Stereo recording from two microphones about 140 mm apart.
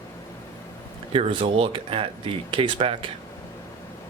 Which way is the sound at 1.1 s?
40° right (ahead or behind).